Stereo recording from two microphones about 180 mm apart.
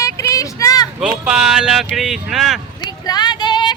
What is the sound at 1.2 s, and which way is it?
Speech, 5° right (ahead or behind).